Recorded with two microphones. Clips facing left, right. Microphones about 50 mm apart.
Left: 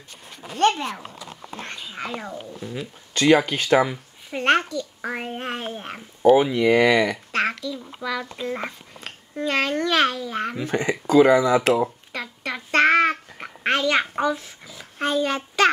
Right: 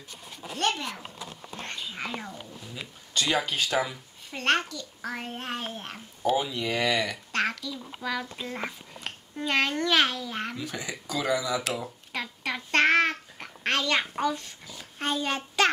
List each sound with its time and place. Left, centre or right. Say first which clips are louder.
0.6 s speech: left 8 dB; left
1.5 s speech: left 4 dB; left
1.9 s speech: left 5 dB; centre
2.6 s speech: left 8 dB; left
4.3 s a child's voice: left 6 dB; left
6.3 s speech: left 11 dB; left
7.6 s a child's voice: left 4 dB; centre
8.2 s speech: left 5 dB; centre
9.4 s a child's voice: left 4 dB; centre
10.6 s speech: left 11 dB; left
12.1 s a sound: left 2 dB; centre
13.4 s babbling: left 5 dB; centre
14.2 s a child's voice: left 4 dB; centre